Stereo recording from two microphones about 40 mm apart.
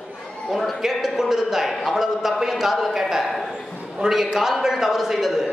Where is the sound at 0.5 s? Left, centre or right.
Centre.